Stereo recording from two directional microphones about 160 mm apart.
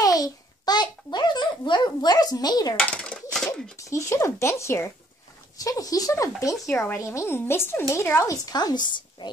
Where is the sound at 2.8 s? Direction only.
5° left (ahead or behind).